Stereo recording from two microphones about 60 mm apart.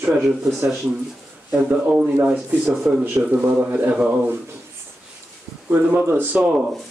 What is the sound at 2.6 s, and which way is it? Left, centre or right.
Speech, centre.